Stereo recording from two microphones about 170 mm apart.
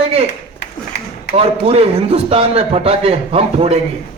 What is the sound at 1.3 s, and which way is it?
A man's voice, 35° right (ahead or behind).